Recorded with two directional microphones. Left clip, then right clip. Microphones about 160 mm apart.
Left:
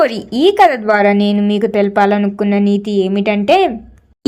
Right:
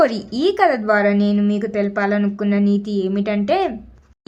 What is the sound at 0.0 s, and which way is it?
Speech, 20° left (ahead or behind).